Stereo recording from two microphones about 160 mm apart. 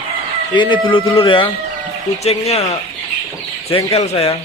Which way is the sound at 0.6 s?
30° left (ahead or behind).